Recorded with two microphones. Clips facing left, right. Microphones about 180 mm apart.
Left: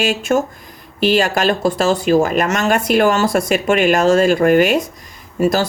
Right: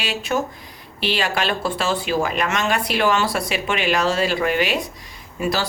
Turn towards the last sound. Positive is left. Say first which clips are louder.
# left 7 dB
turn(degrees=45)  # may be behind; listen again after turning